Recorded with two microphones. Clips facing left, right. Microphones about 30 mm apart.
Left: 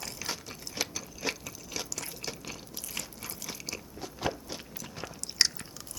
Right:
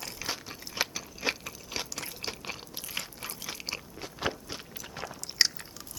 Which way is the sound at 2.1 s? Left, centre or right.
Right.